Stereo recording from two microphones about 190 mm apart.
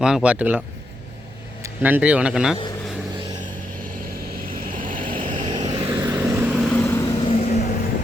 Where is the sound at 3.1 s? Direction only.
25° right (ahead or behind).